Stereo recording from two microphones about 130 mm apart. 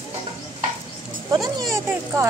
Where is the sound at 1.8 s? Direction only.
20° right (ahead or behind).